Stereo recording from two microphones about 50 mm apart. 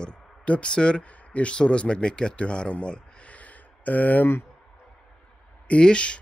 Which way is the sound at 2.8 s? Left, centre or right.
Left.